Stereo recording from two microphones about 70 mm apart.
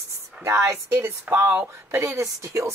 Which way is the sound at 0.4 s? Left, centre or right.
Right.